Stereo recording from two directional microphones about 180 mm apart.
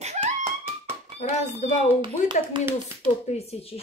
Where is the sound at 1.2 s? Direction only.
40° left (ahead or behind).